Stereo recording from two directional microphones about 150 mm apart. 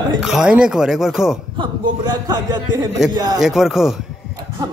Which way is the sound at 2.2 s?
30° right (ahead or behind).